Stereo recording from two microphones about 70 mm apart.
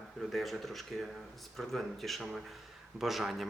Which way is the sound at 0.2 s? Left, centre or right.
Centre.